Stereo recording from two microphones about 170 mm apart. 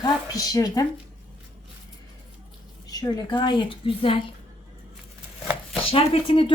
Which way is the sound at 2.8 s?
20° left (ahead or behind).